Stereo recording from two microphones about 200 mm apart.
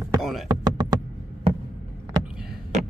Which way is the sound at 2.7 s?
35° right (ahead or behind).